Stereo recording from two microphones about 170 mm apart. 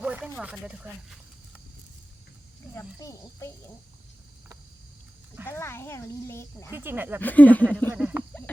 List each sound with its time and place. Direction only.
0.0 s speech: 10° right (ahead or behind)
2.7 s speech: 20° left (ahead or behind)
5.5 s speech: 15° left (ahead or behind)
6.7 s speech: 10° right (ahead or behind)
7.2 s speech: 10° left (ahead or behind)
7.9 s speech: 5° right (ahead or behind)